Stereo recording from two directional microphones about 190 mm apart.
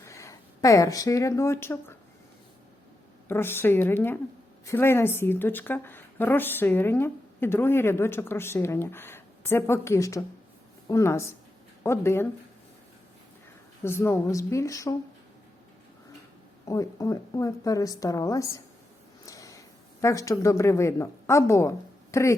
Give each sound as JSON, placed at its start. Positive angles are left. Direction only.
{"t": 0.0, "sound": "speech", "side_deg": 15}
{"t": 3.2, "sound": "a woman's voice", "side_deg": 10}
{"t": 13.8, "sound": "a woman's voice", "side_deg": 15}
{"t": 16.6, "sound": "a woman's voice", "side_deg": 15}